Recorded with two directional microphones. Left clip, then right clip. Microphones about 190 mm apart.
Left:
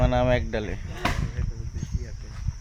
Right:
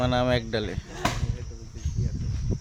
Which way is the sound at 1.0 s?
60° right (ahead or behind).